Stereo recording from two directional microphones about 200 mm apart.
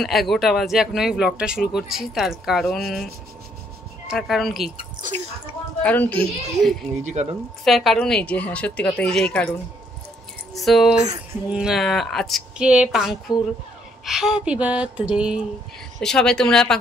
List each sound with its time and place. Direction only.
0.0 s speech: centre (ahead or behind)
4.1 s speech: centre (ahead or behind)
5.0 s speech: 20° right (ahead or behind)
5.8 s a child's voice: 10° left (ahead or behind)
7.0 s speech: 35° right (ahead or behind)
7.6 s speech: centre (ahead or behind)
10.5 s speech: centre (ahead or behind)